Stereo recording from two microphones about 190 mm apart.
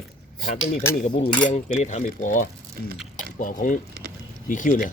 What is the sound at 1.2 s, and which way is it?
Cutlery, 40° left (ahead or behind).